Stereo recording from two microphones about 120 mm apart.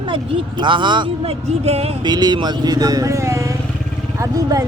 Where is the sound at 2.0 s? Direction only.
35° right (ahead or behind).